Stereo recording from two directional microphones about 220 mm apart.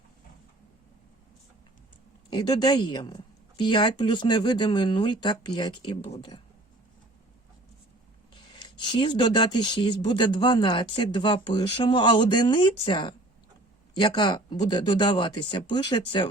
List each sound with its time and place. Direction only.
2.3 s speech: 20° left (ahead or behind)
8.6 s speech: 20° left (ahead or behind)